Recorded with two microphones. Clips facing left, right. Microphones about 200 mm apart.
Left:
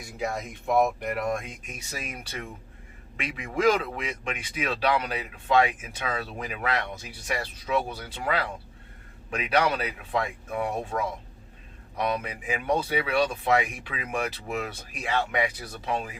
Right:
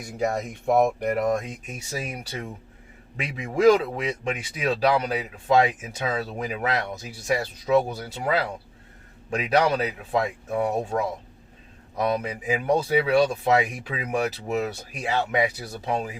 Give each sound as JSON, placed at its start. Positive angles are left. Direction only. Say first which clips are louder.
{"t": 0.2, "sound": "speech", "louder": "right 5 dB", "side_deg": -45}
{"t": 3.2, "sound": "speech", "louder": "right 4 dB", "side_deg": -40}